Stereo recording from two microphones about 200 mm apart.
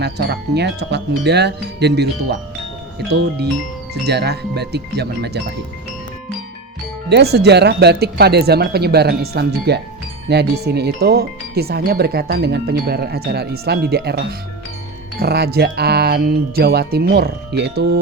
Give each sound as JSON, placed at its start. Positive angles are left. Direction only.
{"t": 0.0, "sound": "speech", "side_deg": -55}
{"t": 3.1, "sound": "speech", "side_deg": -55}
{"t": 7.1, "sound": "speech", "side_deg": -55}